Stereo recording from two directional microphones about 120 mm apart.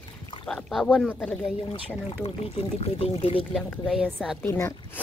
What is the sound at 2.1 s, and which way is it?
Speech, 55° left (ahead or behind).